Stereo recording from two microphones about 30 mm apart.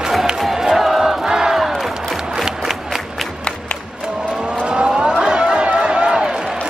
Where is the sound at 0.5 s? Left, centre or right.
Centre.